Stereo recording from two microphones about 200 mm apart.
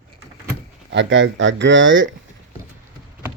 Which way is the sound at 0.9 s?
65° right (ahead or behind).